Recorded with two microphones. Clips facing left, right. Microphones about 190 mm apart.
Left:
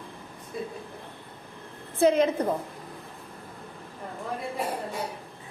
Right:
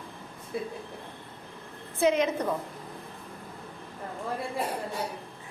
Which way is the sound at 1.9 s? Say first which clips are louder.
Left 3 dB; 35° left (ahead or behind).